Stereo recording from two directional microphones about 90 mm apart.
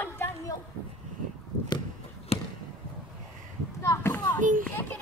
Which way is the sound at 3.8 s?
35° left (ahead or behind).